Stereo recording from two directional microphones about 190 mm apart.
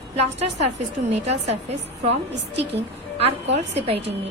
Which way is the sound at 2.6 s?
30° right (ahead or behind).